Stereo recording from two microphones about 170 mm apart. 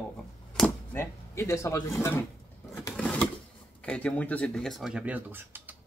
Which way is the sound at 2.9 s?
10° left (ahead or behind).